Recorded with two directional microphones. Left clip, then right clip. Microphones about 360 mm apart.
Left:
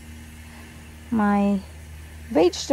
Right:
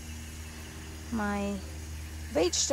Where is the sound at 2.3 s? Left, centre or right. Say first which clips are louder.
Left 8 dB; left.